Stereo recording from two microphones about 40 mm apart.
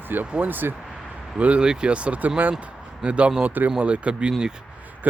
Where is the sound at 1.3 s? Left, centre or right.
Right.